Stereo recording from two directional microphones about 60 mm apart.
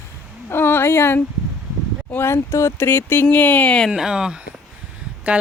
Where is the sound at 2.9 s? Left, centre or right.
Left.